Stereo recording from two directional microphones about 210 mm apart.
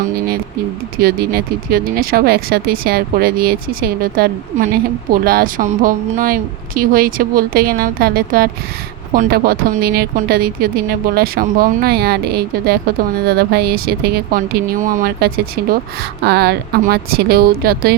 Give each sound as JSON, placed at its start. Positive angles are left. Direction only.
{"t": 0.9, "sound": "speech", "side_deg": -45}